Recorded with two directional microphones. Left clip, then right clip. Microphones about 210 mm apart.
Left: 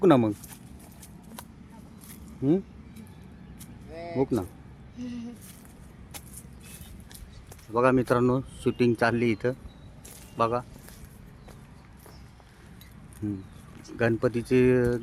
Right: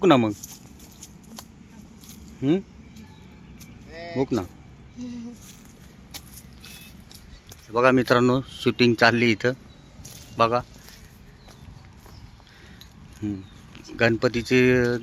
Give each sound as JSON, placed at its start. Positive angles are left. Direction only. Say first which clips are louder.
{"t": 0.0, "sound": "speech", "louder": "right 2 dB", "side_deg": 0}
{"t": 2.4, "sound": "speech", "louder": "right 2 dB", "side_deg": 0}
{"t": 3.9, "sound": "a sound", "louder": "right 2 dB", "side_deg": 55}
{"t": 4.2, "sound": "speech", "louder": "right 2 dB", "side_deg": 5}
{"t": 7.8, "sound": "speech", "louder": "right 4 dB", "side_deg": -5}
{"t": 13.2, "sound": "speech", "louder": "right 3 dB", "side_deg": -5}